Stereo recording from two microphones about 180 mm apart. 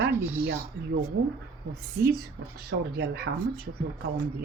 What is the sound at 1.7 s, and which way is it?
Speech, 60° right (ahead or behind).